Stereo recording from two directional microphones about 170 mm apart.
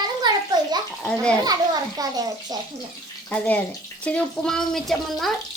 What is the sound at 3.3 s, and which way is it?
Speech, 10° left (ahead or behind).